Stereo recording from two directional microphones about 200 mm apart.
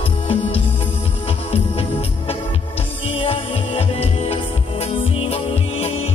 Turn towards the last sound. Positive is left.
turn(degrees=30)  # may be behind; listen again after turning